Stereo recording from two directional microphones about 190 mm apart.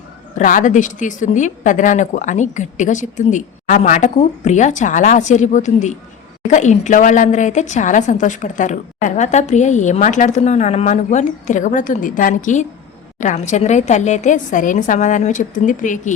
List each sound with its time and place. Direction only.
0.3 s a woman's voice: 45° left (ahead or behind)